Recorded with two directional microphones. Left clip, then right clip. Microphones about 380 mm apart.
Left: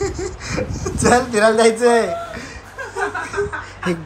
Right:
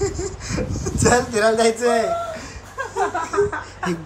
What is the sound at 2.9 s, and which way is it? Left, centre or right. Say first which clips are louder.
Chuckle: right 1 dB; centre.